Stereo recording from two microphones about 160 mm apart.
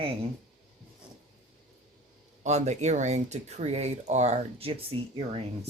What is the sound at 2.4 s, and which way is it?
Speech, 45° right (ahead or behind).